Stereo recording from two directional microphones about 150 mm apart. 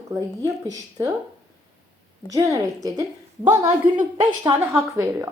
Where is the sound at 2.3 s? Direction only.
20° right (ahead or behind).